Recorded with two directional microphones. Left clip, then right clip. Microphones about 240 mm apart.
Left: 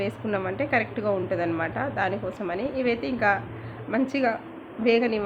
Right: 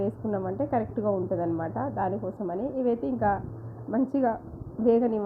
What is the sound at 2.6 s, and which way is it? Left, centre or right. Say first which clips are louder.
Speech: left 1 dB; centre.